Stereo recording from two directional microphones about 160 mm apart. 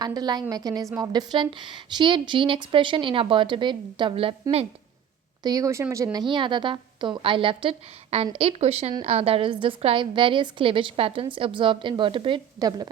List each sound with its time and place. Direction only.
0.0 s a woman's voice: 25° right (ahead or behind)
5.4 s a woman's voice: 25° right (ahead or behind)